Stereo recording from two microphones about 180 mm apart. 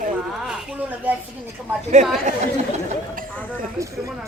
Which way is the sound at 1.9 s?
40° right (ahead or behind).